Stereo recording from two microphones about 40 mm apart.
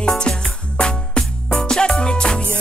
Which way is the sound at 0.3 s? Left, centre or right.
Left.